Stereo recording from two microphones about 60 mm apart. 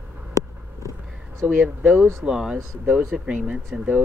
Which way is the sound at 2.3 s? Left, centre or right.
Centre.